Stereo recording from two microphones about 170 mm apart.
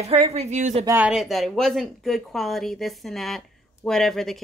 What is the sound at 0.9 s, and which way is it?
Speech, 10° right (ahead or behind).